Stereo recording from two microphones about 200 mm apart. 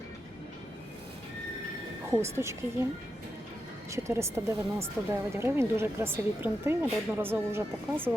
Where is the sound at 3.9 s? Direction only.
15° right (ahead or behind).